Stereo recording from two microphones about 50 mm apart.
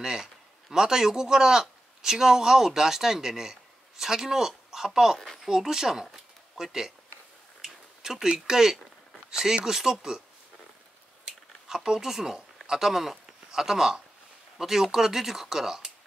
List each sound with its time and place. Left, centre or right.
0.0 s a man's voice: centre
6.0 s a sound: centre
9.3 s speech: centre
11.2 s speech: centre